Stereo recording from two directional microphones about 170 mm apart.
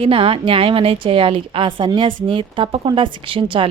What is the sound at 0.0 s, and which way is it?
A woman's voice, 30° right (ahead or behind).